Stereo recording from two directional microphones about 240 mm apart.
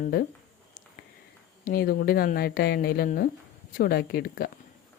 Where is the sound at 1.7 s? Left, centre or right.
Left.